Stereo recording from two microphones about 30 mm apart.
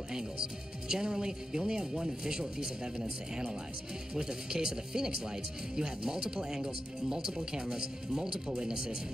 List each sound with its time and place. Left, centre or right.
0.8 s speech: right